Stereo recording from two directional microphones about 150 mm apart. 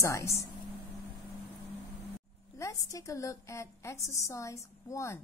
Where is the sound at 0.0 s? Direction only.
20° left (ahead or behind).